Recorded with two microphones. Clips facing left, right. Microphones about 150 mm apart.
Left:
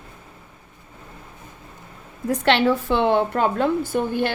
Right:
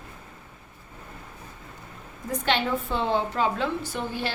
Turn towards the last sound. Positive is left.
turn(degrees=55)  # may be behind; listen again after turning